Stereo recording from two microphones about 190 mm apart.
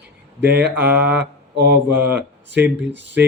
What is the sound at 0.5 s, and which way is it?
Mantra, 10° right (ahead or behind).